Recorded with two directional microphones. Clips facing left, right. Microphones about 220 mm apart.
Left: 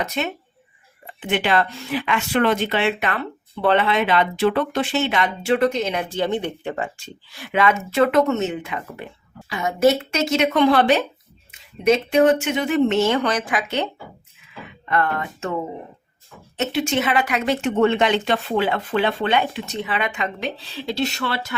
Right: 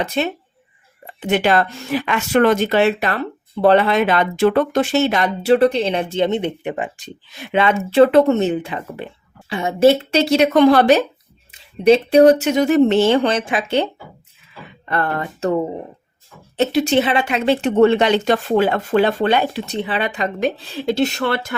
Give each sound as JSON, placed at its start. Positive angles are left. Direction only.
{"t": 0.0, "sound": "speech", "side_deg": -30}
{"t": 16.6, "sound": "speech", "side_deg": -35}